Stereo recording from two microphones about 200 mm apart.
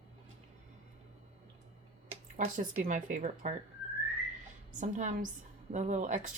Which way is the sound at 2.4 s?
40° right (ahead or behind).